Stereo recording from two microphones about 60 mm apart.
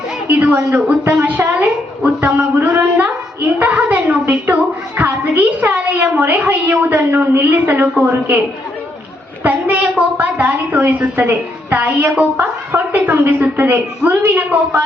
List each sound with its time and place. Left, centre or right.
0.3 s a woman's voice: right
6.8 s a woman's voice: right
9.4 s a woman's voice: right